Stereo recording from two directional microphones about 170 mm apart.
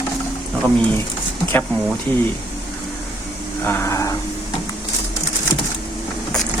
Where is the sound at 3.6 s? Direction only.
15° left (ahead or behind).